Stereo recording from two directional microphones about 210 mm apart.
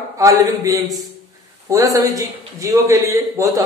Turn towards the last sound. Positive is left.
turn(degrees=-15)  # may be behind; listen again after turning